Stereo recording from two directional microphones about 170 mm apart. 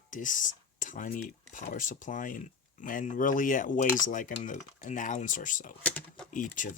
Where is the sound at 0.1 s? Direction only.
50° left (ahead or behind).